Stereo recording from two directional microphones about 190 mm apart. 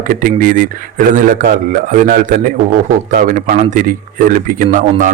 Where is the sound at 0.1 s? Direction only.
45° right (ahead or behind).